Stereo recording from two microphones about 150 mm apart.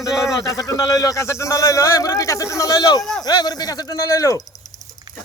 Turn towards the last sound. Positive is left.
turn(degrees=20)  # may be behind; listen again after turning